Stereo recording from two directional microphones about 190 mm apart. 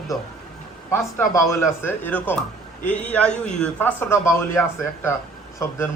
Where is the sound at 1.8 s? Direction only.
10° left (ahead or behind).